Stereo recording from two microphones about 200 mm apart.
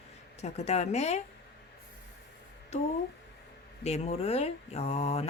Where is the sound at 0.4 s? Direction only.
35° left (ahead or behind).